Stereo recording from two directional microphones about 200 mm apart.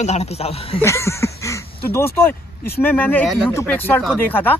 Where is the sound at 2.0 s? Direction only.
10° left (ahead or behind).